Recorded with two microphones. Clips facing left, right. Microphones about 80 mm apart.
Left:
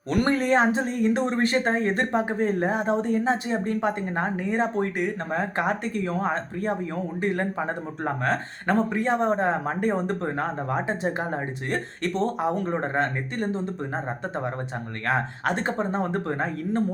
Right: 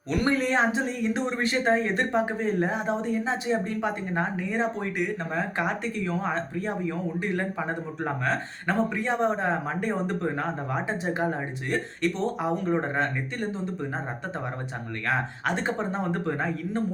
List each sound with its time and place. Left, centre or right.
0.1 s speech: left
15.0 s speech: left